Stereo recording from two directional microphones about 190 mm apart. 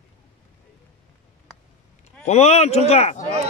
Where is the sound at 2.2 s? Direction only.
35° left (ahead or behind).